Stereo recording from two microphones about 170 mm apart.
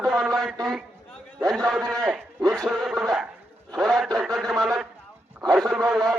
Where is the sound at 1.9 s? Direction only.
Centre (ahead or behind).